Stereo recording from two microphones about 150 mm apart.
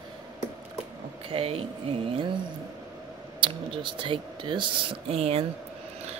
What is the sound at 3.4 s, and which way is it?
Speech, 35° right (ahead or behind).